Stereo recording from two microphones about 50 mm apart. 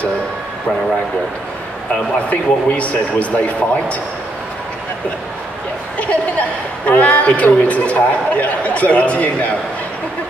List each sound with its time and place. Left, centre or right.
2.2 s a man's voice: left
5.9 s a man's voice: left